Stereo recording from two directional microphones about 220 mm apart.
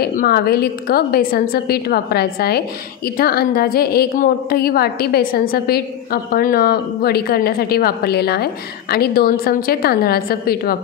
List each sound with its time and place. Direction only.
0.0 s a woman's voice: 45° left (ahead or behind)